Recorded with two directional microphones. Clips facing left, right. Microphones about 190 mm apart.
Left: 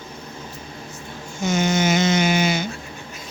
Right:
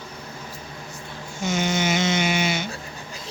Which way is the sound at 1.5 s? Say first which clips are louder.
Left 4 dB; 45° left (ahead or behind).